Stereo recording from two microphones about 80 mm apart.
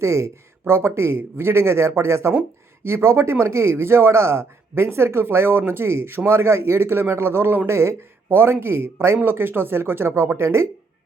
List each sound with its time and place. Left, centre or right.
0.0 s a man's voice: right